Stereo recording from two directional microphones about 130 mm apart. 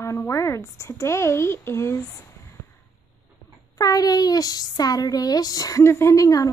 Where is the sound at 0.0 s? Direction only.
20° left (ahead or behind).